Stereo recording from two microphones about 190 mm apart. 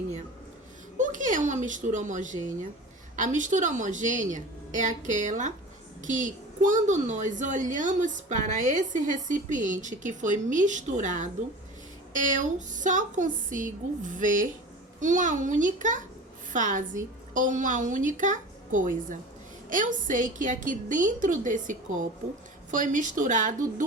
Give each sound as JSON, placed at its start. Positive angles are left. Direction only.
{"t": 0.9, "sound": "a woman's voice", "side_deg": -40}